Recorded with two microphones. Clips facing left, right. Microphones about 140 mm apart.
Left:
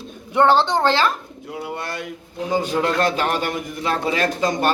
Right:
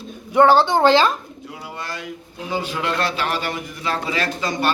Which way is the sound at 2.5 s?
40° left (ahead or behind).